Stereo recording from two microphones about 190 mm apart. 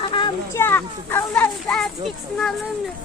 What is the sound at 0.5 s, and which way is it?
A child's voice, 10° left (ahead or behind).